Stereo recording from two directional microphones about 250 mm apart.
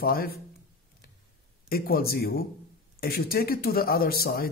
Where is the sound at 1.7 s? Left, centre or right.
Left.